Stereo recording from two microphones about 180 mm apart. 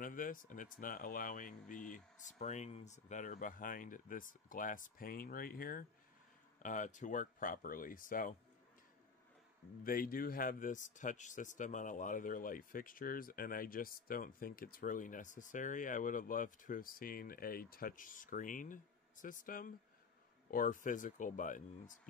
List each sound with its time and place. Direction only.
0.0 s speech: 50° left (ahead or behind)
9.8 s speech: 50° left (ahead or behind)